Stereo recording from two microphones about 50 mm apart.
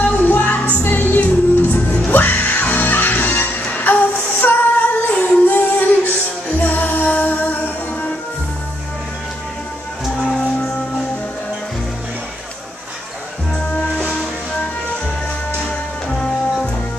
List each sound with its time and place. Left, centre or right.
0.0 s music: left
10.0 s music: centre
13.7 s music: left
16.1 s music: centre